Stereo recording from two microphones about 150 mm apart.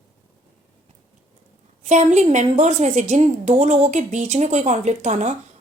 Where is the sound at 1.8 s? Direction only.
50° right (ahead or behind).